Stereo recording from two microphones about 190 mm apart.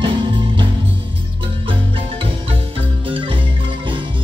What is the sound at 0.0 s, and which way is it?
Music, 25° right (ahead or behind).